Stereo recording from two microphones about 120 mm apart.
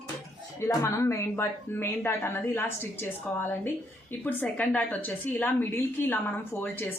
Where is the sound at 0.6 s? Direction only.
25° left (ahead or behind).